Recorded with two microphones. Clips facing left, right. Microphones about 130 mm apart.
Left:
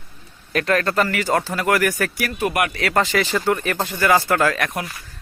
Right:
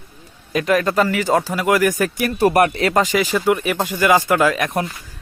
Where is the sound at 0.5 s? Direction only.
15° right (ahead or behind).